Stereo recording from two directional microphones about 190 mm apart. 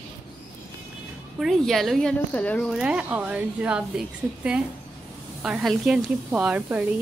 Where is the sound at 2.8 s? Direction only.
5° right (ahead or behind).